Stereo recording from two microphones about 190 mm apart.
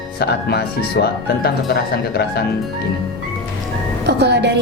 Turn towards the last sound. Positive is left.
turn(degrees=-60)  # may be behind; listen again after turning